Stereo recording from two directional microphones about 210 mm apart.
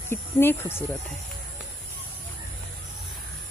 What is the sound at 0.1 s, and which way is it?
Speech, 10° left (ahead or behind).